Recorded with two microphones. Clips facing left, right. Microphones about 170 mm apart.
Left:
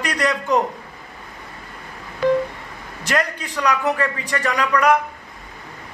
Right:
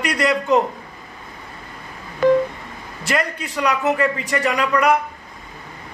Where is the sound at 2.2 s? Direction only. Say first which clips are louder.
Right 3 dB; 50° right (ahead or behind).